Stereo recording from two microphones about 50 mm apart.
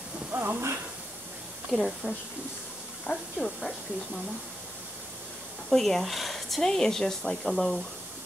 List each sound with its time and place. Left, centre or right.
0.3 s hiss: right
1.7 s speech: centre
3.1 s speech: centre
5.7 s speech: centre